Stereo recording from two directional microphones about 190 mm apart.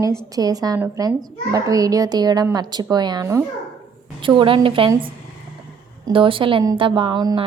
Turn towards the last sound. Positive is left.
turn(degrees=-25)  # may be behind; listen again after turning